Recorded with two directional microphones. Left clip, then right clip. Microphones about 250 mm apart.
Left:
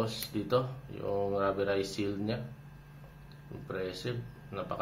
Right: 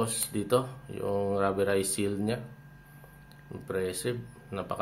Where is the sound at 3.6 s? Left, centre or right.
Right.